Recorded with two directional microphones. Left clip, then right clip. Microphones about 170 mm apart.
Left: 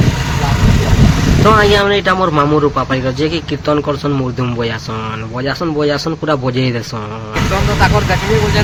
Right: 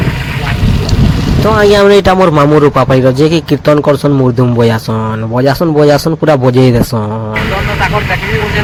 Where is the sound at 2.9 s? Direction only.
50° right (ahead or behind).